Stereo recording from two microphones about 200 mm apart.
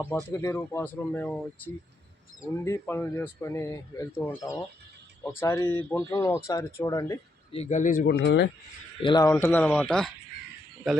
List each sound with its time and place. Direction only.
0.1 s speech: 10° left (ahead or behind)
7.5 s speech: 35° left (ahead or behind)
8.2 s speech: 65° left (ahead or behind)
9.0 s speech: 20° left (ahead or behind); by 11.0 s centre (ahead or behind)